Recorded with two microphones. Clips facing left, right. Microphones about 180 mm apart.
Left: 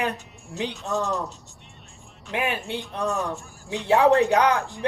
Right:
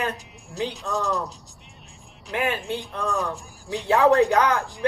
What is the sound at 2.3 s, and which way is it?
Speech, 15° left (ahead or behind).